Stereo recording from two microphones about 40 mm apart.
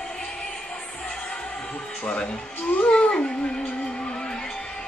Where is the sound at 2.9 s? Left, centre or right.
Left.